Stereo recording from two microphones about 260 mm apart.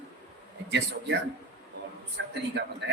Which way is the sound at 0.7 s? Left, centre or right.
Right.